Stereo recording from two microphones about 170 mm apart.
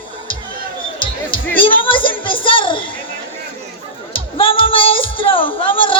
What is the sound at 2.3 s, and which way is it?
Music, 30° left (ahead or behind).